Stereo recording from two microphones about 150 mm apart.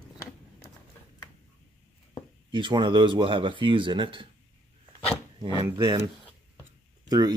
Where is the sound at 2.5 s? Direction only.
30° right (ahead or behind).